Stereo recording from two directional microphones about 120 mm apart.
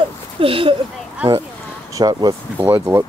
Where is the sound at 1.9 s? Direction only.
35° right (ahead or behind).